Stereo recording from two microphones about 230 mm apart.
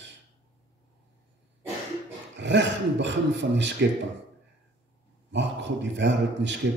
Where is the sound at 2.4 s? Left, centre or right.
Right.